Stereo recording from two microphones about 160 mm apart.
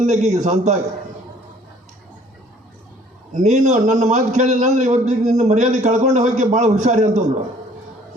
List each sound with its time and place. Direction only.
0.0 s a man's voice: 45° right (ahead or behind)
3.3 s a man's voice: 50° right (ahead or behind)